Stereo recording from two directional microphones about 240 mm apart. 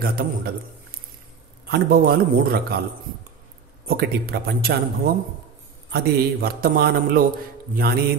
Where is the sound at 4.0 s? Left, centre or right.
Right.